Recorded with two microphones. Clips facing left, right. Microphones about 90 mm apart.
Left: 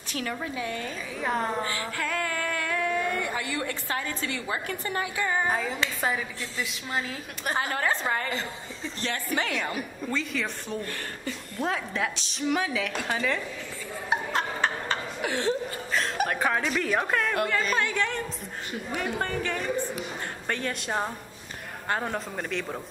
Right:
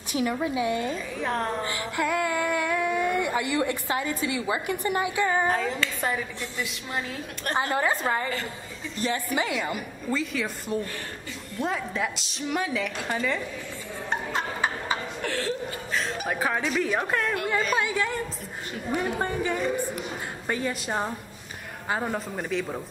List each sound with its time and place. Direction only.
0.1 s speech: 15° right (ahead or behind)
1.1 s a woman's voice: 5° left (ahead or behind)
1.7 s speech: 20° right (ahead or behind)
5.5 s a woman's voice: centre (ahead or behind)
7.7 s a woman's voice: 10° right (ahead or behind)
15.2 s chuckle: 20° left (ahead or behind)
15.9 s a woman's voice: centre (ahead or behind)